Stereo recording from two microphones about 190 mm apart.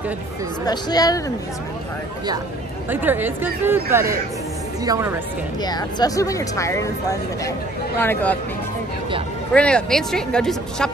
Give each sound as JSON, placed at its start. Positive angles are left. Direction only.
{"t": 0.7, "sound": "speech", "side_deg": 20}
{"t": 2.9, "sound": "a woman's voice", "side_deg": -10}
{"t": 5.6, "sound": "speech", "side_deg": 20}
{"t": 9.5, "sound": "speech", "side_deg": 5}